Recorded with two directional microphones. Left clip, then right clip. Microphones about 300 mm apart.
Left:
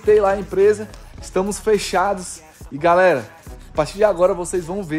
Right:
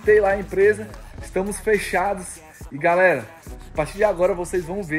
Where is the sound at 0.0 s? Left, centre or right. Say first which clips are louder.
Left 2 dB; centre.